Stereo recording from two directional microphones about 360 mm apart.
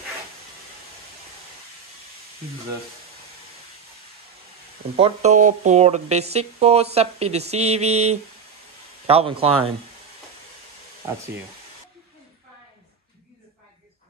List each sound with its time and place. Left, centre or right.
4.9 s speech: centre